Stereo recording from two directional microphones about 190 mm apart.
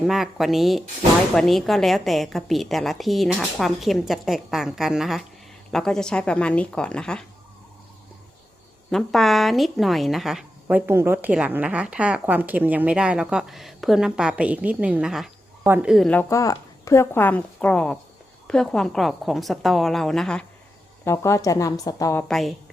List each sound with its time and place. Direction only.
0.0 s a woman's voice: centre (ahead or behind)
8.9 s a woman's voice: centre (ahead or behind)
21.0 s a woman's voice: 15° left (ahead or behind)
22.2 s a woman's voice: centre (ahead or behind)